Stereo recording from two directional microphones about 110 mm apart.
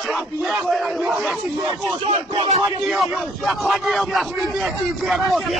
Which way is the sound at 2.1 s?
65° right (ahead or behind).